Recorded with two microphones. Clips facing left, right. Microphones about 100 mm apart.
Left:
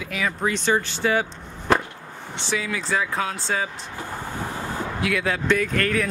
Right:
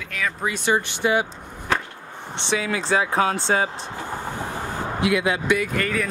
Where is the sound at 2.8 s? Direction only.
25° right (ahead or behind).